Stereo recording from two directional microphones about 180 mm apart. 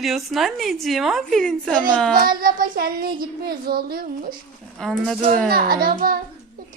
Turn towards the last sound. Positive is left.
turn(degrees=-55)  # may be behind; listen again after turning